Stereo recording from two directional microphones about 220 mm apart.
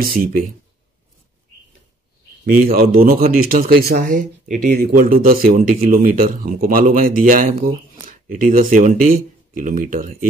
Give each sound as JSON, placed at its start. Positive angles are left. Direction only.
{"t": 0.0, "sound": "speech", "side_deg": -40}
{"t": 2.4, "sound": "speech", "side_deg": -40}